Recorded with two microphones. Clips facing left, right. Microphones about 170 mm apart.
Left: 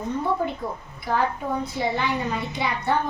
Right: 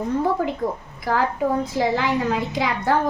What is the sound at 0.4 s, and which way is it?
A woman's voice, 90° right.